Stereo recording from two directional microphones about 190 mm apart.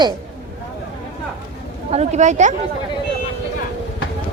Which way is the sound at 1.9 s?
35° right (ahead or behind).